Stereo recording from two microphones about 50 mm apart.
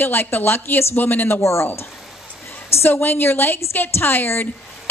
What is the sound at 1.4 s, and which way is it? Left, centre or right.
Speech, left.